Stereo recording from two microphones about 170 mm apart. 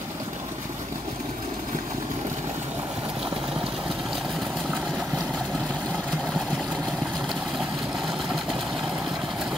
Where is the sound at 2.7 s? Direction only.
5° right (ahead or behind).